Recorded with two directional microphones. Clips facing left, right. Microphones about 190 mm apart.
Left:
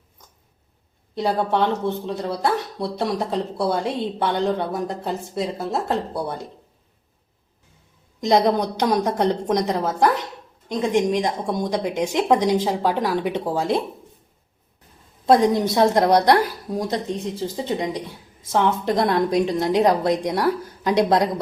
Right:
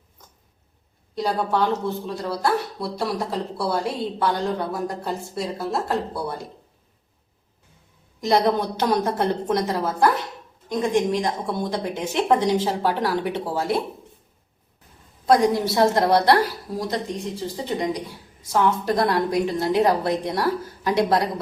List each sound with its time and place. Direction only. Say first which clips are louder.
1.1 s speech: left 2 dB; 25° left (ahead or behind)
8.2 s a woman's voice: left 2 dB; 20° left (ahead or behind)
15.3 s speech: left 2 dB; 20° left (ahead or behind)